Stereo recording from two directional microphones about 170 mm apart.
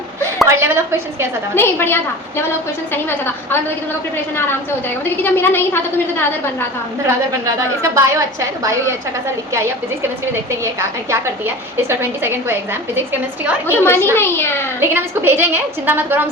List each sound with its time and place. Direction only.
0.4 s a woman's voice: 15° right (ahead or behind)
1.5 s a woman's voice: 15° left (ahead or behind)
5.0 s a woman's voice: 10° left (ahead or behind)
7.4 s a woman's voice: 20° right (ahead or behind)
13.7 s a woman's voice: 15° left (ahead or behind)
14.8 s a woman's voice: 15° right (ahead or behind)